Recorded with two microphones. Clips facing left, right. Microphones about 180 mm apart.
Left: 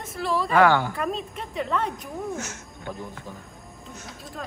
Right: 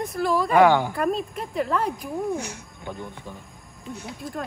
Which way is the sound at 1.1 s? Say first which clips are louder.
Right 4 dB; 5° right (ahead or behind).